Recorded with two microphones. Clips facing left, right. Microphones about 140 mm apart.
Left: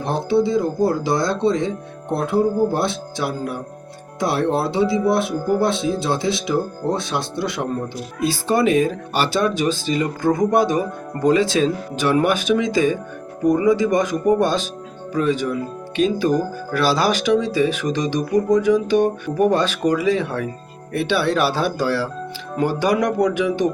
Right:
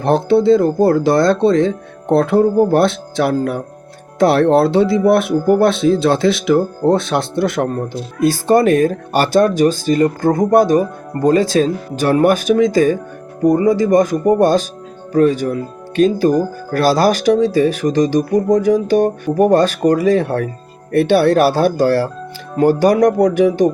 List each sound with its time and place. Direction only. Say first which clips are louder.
0.0 s speech: right 6 dB; 65° right (ahead or behind); by 23.6 s 40° right (ahead or behind)